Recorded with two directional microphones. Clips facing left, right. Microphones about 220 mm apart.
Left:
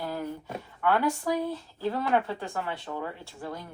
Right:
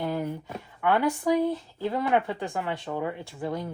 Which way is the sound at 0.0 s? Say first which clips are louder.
Right 4 dB; 20° right (ahead or behind).